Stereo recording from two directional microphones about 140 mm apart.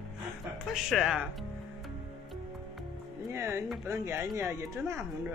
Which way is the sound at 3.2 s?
20° right (ahead or behind).